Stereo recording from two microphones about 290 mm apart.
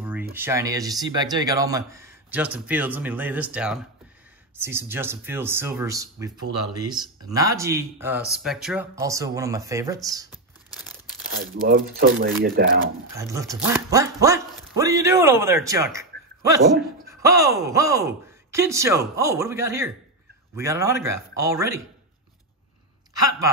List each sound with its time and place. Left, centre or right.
0.0 s speech: centre
11.3 s speech: right
13.1 s speech: centre